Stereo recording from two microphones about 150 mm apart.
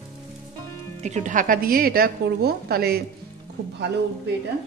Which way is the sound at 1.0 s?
50° right (ahead or behind).